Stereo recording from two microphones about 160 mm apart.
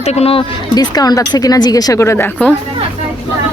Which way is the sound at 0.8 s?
25° left (ahead or behind).